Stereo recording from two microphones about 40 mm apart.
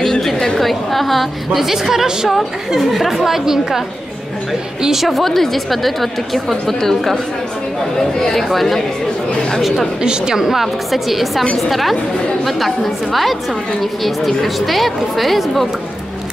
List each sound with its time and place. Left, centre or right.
0.0 s chatter: centre
0.6 s a woman's voice: centre
5.0 s a woman's voice: centre
8.2 s a woman's voice: centre
10.0 s a woman's voice: centre